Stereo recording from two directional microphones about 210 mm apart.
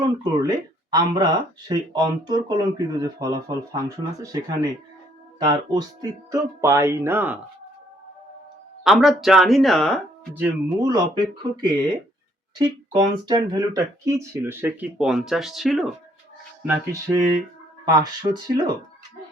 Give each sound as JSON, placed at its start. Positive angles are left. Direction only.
{"t": 0.0, "sound": "speech", "side_deg": -15}
{"t": 8.8, "sound": "speech", "side_deg": 0}
{"t": 10.8, "sound": "speech", "side_deg": -20}
{"t": 12.5, "sound": "speech", "side_deg": -20}
{"t": 16.6, "sound": "speech", "side_deg": -15}